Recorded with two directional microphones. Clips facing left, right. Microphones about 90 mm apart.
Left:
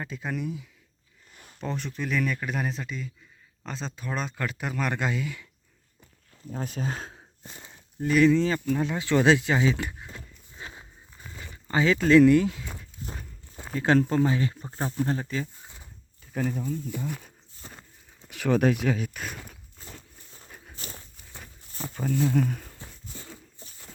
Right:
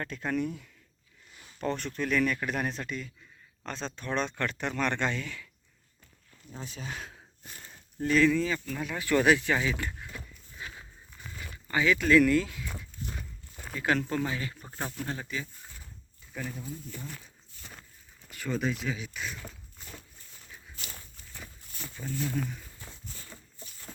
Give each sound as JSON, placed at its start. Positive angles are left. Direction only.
{"t": 0.0, "sound": "speech", "side_deg": 5}
{"t": 6.5, "sound": "speech", "side_deg": 50}
{"t": 11.7, "sound": "walk", "side_deg": 30}
{"t": 13.7, "sound": "speech", "side_deg": 35}
{"t": 15.6, "sound": "a sound", "side_deg": 20}
{"t": 16.3, "sound": "speech", "side_deg": 50}
{"t": 16.9, "sound": "speech", "side_deg": 20}
{"t": 17.6, "sound": "a sound", "side_deg": 35}
{"t": 18.3, "sound": "speech", "side_deg": 75}
{"t": 19.8, "sound": "a sound", "side_deg": 35}
{"t": 22.1, "sound": "speech", "side_deg": 30}
{"t": 22.4, "sound": "speech", "side_deg": 55}
{"t": 22.8, "sound": "a sound", "side_deg": 25}